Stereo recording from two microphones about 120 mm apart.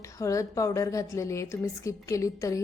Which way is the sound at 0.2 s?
25° left (ahead or behind).